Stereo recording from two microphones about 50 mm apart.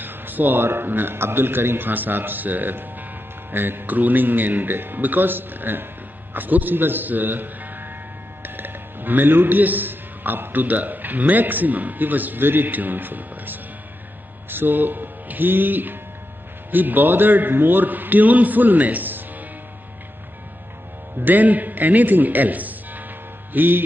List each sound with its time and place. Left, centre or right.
0.0 s a man's voice: right
21.2 s a man's voice: right